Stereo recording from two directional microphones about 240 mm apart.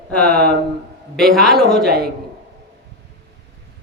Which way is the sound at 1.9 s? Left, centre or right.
Right.